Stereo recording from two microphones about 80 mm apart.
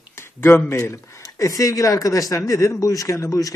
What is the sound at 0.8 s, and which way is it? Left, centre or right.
Speech, left.